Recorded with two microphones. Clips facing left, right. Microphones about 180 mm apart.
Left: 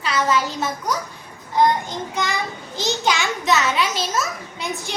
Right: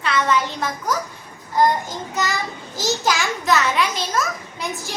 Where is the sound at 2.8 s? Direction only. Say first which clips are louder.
Even; centre (ahead or behind).